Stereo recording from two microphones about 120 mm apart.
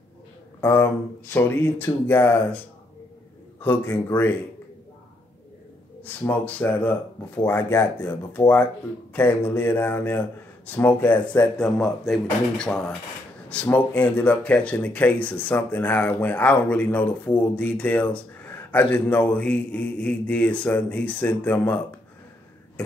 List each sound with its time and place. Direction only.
0.6 s speech: 15° left (ahead or behind)
3.6 s a man's voice: 20° left (ahead or behind)
6.0 s speech: 15° left (ahead or behind)